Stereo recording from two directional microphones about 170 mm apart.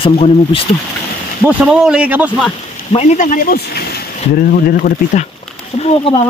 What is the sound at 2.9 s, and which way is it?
Speech, 40° left (ahead or behind).